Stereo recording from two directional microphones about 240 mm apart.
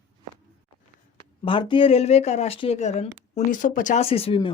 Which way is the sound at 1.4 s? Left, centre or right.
Centre.